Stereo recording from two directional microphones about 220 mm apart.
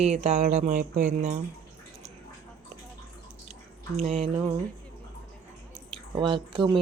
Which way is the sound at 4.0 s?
25° right (ahead or behind).